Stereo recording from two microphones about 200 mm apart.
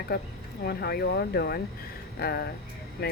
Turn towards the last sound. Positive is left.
turn(degrees=50)  # may be behind; listen again after turning